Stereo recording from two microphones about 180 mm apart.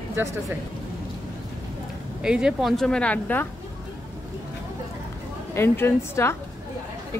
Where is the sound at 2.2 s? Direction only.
5° right (ahead or behind).